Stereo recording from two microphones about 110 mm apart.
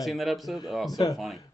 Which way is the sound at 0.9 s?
30° left (ahead or behind).